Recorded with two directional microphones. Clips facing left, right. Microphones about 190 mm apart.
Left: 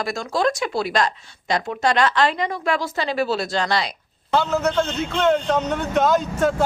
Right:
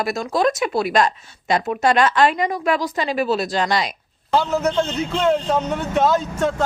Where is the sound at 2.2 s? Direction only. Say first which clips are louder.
Right 3 dB; 15° right (ahead or behind).